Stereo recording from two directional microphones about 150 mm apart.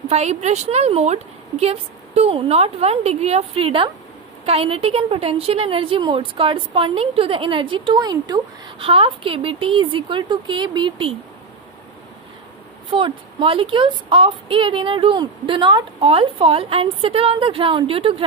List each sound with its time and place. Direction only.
0.1 s a woman's voice: 45° right (ahead or behind)
12.9 s a woman's voice: 35° right (ahead or behind)